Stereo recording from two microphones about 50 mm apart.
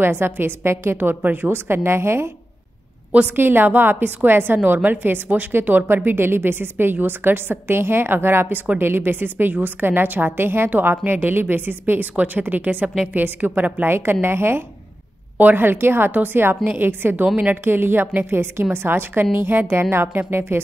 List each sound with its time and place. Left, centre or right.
0.0 s a woman's voice: right
1.7 s a woman's voice: right
3.1 s a woman's voice: right
3.3 s a woman's voice: right
4.6 s a woman's voice: right
13.8 s a woman's voice: right
15.3 s a woman's voice: right